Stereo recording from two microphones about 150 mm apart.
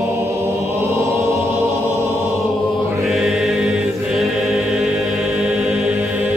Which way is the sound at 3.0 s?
Centre (ahead or behind).